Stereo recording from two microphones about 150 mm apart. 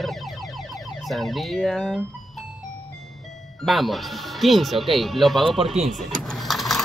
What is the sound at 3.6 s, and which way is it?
Speech, centre (ahead or behind).